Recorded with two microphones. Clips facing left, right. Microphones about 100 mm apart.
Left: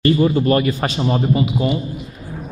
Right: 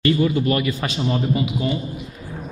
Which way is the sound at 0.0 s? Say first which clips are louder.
Left 3 dB; 35° left (ahead or behind).